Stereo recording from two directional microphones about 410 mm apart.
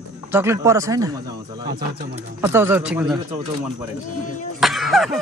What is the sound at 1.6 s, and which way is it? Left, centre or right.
Speech, right.